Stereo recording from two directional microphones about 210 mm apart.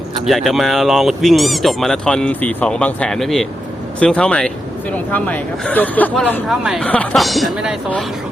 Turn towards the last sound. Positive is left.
turn(degrees=-5)  # may be behind; listen again after turning